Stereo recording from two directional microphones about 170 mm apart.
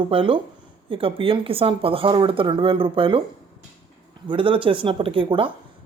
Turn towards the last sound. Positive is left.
turn(degrees=-30)  # may be behind; listen again after turning